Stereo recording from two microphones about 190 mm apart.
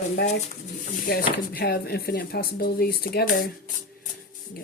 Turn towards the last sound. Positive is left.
turn(degrees=55)  # may be behind; listen again after turning